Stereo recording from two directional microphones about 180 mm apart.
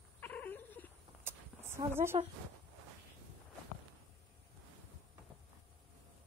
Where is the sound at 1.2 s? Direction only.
15° right (ahead or behind).